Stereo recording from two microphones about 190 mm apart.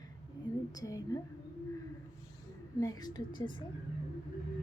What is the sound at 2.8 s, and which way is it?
Speech, 20° left (ahead or behind).